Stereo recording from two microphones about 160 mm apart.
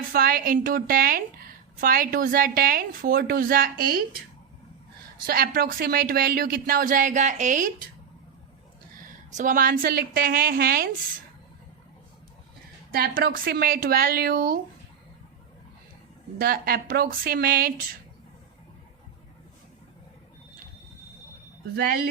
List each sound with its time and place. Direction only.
0.1 s a woman's voice: 65° right (ahead or behind)
5.2 s speech: 70° right (ahead or behind); by 7.9 s 55° right (ahead or behind)
9.3 s a woman's voice: 55° right (ahead or behind); by 10.9 s 70° right (ahead or behind)
12.9 s speech: 70° right (ahead or behind)
16.4 s speech: 70° right (ahead or behind)
21.8 s speech: 75° right (ahead or behind)